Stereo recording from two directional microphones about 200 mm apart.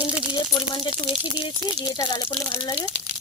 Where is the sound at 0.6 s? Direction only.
25° left (ahead or behind).